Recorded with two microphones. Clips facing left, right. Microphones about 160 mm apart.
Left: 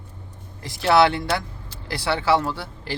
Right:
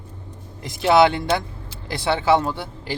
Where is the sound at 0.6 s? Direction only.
20° right (ahead or behind).